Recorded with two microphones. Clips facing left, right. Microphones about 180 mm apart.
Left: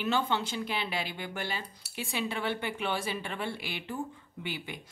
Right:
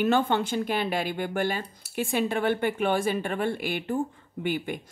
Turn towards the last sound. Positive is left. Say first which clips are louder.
# right 10 dB
turn(degrees=-50)  # may be behind; listen again after turning